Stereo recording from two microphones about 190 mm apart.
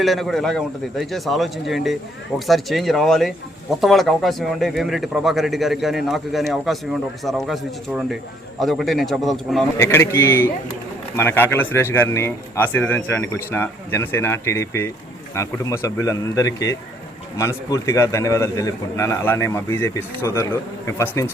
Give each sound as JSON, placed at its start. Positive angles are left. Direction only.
{"t": 0.0, "sound": "speech", "side_deg": 0}
{"t": 9.7, "sound": "a man's voice", "side_deg": 15}